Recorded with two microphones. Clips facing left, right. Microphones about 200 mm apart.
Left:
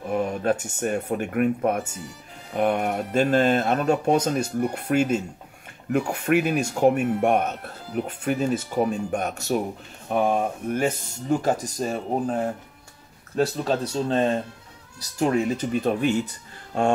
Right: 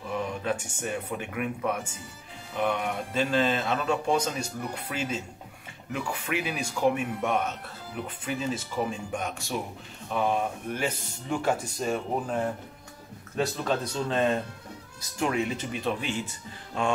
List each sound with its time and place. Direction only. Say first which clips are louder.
0.1 s speech: left 7 dB; 50° left (ahead or behind)